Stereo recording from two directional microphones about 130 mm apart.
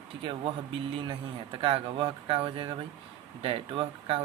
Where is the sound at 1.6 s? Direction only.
40° right (ahead or behind).